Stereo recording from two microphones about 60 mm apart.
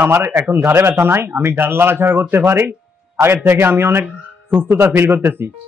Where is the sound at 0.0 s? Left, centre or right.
Right.